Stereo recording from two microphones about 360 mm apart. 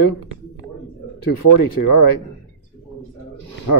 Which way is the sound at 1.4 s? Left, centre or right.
Left.